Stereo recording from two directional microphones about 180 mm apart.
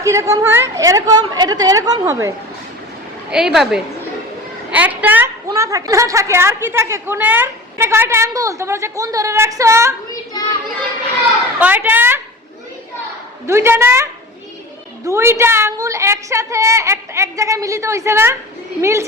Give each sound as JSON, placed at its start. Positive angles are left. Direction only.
{"t": 0.0, "sound": "a woman's voice", "side_deg": -15}
{"t": 3.3, "sound": "a woman's voice", "side_deg": 0}
{"t": 11.6, "sound": "a woman's voice", "side_deg": -10}
{"t": 13.5, "sound": "a woman's voice", "side_deg": -15}